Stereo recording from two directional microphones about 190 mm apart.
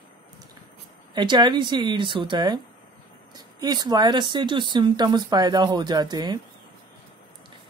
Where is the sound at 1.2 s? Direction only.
25° right (ahead or behind).